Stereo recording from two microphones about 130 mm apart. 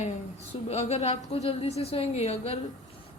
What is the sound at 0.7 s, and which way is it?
A woman's voice, 55° left (ahead or behind).